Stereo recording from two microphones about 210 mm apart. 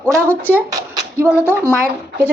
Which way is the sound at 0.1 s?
10° right (ahead or behind).